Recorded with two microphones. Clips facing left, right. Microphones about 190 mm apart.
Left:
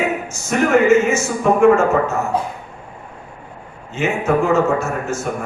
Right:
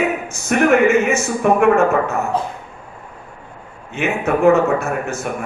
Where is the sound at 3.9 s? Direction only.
60° right (ahead or behind).